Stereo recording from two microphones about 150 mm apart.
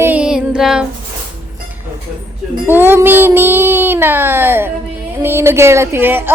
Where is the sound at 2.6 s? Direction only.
15° right (ahead or behind).